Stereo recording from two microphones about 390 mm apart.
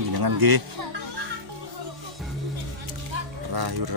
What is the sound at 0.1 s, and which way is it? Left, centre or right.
Speech, right.